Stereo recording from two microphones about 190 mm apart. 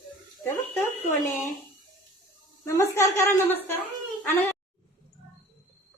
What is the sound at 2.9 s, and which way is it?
Speech, 15° left (ahead or behind).